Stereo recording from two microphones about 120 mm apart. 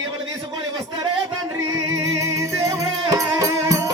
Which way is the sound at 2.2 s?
25° right (ahead or behind).